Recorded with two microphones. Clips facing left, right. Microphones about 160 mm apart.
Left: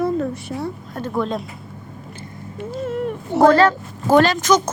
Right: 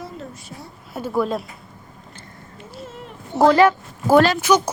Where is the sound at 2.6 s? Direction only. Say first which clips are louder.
Left 13 dB; 60° left (ahead or behind).